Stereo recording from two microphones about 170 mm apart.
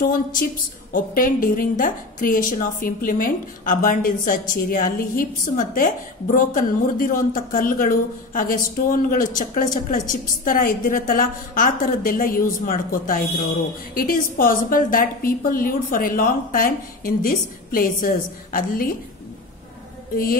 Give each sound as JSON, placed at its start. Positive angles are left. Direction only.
{"t": 0.0, "sound": "a woman's voice", "side_deg": 55}